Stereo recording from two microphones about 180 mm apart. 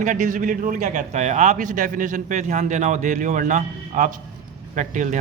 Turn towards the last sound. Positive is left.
turn(degrees=-45)  # may be behind; listen again after turning